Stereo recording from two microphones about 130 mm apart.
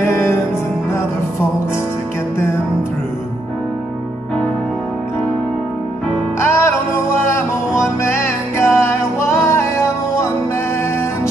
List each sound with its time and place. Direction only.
0.0 s music: 20° left (ahead or behind)
6.4 s music: 20° left (ahead or behind)